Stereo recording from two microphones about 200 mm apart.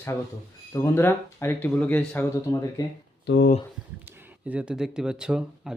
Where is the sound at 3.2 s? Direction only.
60° left (ahead or behind).